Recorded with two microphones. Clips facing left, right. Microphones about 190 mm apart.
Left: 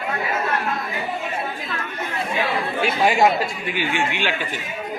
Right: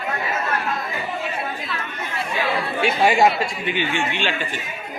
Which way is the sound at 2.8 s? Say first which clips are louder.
Right 1 dB; centre (ahead or behind).